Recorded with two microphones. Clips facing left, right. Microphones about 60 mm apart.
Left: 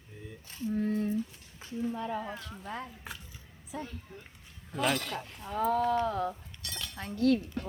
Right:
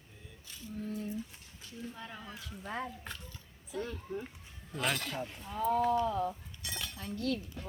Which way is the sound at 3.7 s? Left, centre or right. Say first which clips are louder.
Right 1 dB; centre.